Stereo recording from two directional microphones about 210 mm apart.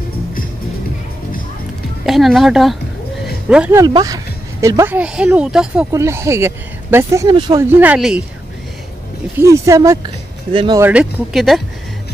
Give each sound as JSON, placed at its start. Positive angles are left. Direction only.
{"t": 2.0, "sound": "speech", "side_deg": 0}
{"t": 3.8, "sound": "speech", "side_deg": -20}
{"t": 7.8, "sound": "speech", "side_deg": -5}
{"t": 9.4, "sound": "speech", "side_deg": -15}
{"t": 10.8, "sound": "speech", "side_deg": -5}